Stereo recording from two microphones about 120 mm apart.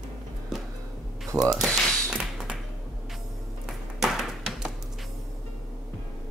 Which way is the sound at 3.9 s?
5° right (ahead or behind).